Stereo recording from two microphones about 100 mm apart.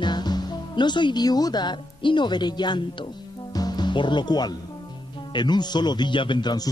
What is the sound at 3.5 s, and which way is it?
Music, 40° left (ahead or behind).